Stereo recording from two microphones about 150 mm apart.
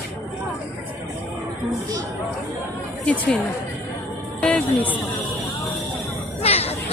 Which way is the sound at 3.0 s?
10° left (ahead or behind).